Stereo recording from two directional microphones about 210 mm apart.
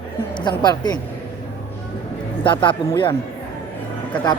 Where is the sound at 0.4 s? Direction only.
20° left (ahead or behind).